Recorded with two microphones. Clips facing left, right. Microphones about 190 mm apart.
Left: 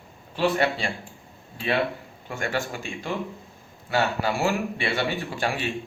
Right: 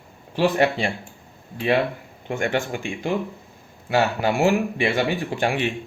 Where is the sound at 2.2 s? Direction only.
20° right (ahead or behind).